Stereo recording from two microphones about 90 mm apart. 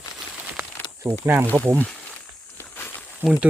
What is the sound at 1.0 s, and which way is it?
Speech, 25° right (ahead or behind).